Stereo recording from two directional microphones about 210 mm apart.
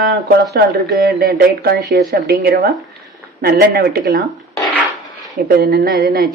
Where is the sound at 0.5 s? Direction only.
45° right (ahead or behind).